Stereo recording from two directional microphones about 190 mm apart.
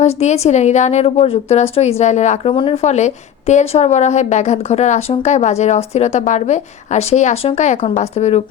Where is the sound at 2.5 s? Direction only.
25° left (ahead or behind).